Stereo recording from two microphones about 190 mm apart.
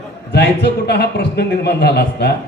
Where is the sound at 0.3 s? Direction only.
60° left (ahead or behind).